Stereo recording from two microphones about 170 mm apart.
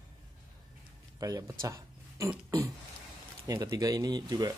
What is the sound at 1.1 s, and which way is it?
Speech, 20° right (ahead or behind).